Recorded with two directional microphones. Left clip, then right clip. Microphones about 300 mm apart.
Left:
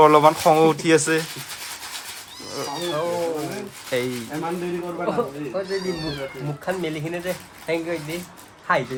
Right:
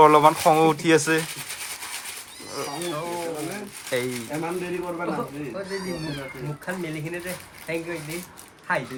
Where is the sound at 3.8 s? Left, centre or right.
Centre.